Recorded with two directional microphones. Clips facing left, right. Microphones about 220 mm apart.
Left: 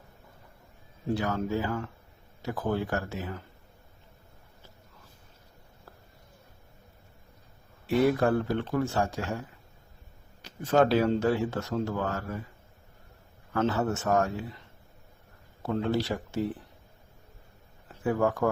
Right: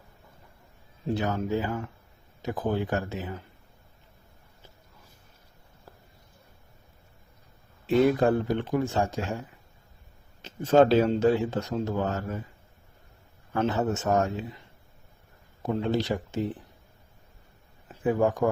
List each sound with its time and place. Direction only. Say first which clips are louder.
1.0 s speech: right 1 dB; 20° right (ahead or behind)
7.9 s speech: right 2 dB; 20° right (ahead or behind)
13.5 s speech: right 1 dB; 20° right (ahead or behind)
15.6 s speech: right 1 dB; 15° right (ahead or behind)
17.8 s speech: right 2 dB; 15° right (ahead or behind)